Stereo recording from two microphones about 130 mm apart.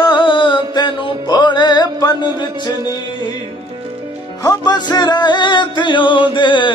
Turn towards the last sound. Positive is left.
turn(degrees=40)  # may be behind; listen again after turning